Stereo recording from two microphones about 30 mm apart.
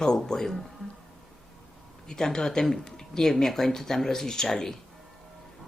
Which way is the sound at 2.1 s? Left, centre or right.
Left.